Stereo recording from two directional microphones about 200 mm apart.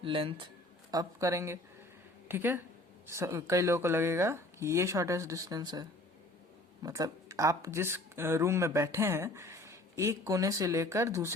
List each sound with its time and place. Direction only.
0.0 s speech: 25° right (ahead or behind)